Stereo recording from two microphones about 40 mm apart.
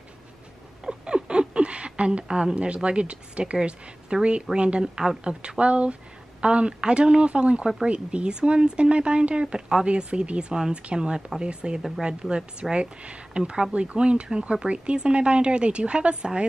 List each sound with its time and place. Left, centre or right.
0.8 s a sound: right
2.2 s speech: centre
2.5 s speech: right
5.2 s speech: right